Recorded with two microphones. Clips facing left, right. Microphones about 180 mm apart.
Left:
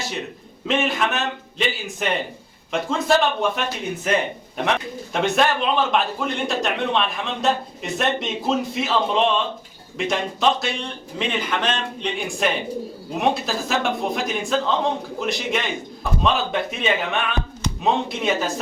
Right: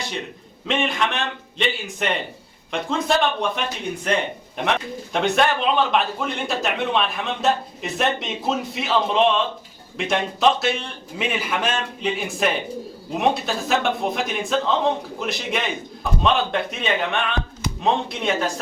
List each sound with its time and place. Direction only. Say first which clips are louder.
0.7 s a man's voice: left 1 dB; centre (ahead or behind)